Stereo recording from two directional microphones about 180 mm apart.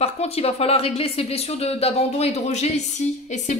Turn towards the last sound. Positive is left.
turn(degrees=40)  # may be behind; listen again after turning